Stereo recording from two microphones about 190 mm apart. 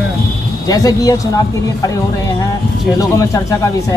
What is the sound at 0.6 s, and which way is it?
Speech, 20° left (ahead or behind).